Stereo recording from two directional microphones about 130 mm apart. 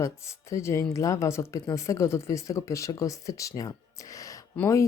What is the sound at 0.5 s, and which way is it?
Speech, 20° left (ahead or behind).